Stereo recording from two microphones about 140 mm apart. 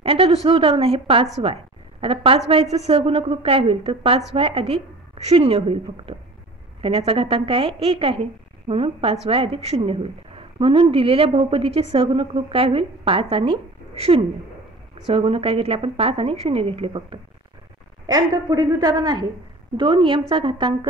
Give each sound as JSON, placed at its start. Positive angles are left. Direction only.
{"t": 0.0, "sound": "a woman's voice", "side_deg": -45}